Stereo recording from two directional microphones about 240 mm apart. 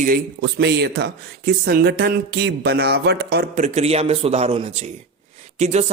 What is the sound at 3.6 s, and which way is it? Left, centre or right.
A man's voice, right.